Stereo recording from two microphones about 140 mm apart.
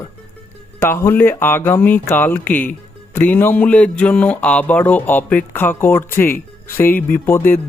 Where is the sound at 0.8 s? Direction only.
15° left (ahead or behind).